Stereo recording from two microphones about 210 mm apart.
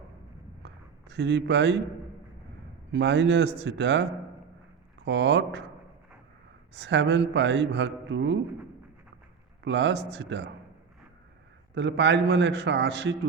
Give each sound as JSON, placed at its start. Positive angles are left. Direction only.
{"t": 0.6, "sound": "a sound", "side_deg": -55}
{"t": 2.9, "sound": "speech", "side_deg": -55}
{"t": 5.0, "sound": "speech", "side_deg": -60}
{"t": 6.7, "sound": "speech", "side_deg": -55}
{"t": 9.6, "sound": "speech", "side_deg": -55}
{"t": 11.7, "sound": "speech", "side_deg": -55}